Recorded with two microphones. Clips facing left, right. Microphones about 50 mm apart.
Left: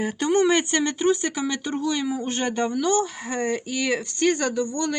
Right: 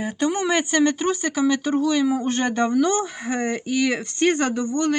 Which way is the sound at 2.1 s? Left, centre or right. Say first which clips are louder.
Right 3 dB; right.